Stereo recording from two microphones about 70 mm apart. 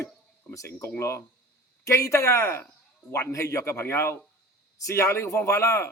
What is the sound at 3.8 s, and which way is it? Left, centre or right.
A man's voice, left.